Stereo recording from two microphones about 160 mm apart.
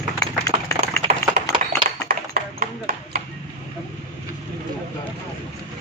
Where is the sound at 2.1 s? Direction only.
60° right (ahead or behind).